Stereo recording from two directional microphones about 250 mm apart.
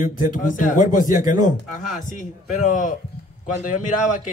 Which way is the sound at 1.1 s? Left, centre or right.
Centre.